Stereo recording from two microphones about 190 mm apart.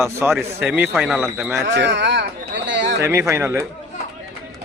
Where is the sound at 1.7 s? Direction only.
65° right (ahead or behind).